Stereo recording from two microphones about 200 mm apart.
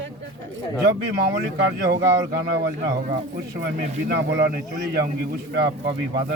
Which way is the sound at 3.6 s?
55° right (ahead or behind).